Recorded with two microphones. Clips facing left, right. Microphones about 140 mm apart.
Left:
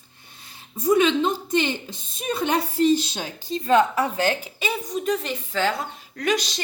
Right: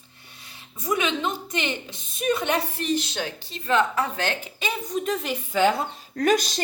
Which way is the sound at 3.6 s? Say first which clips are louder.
Left 3 dB; 15° left (ahead or behind).